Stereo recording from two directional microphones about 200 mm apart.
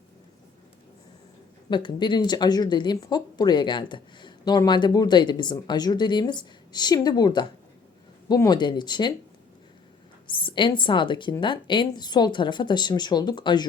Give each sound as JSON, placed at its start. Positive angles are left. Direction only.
{"t": 1.7, "sound": "speech", "side_deg": 25}
{"t": 10.2, "sound": "speech", "side_deg": 25}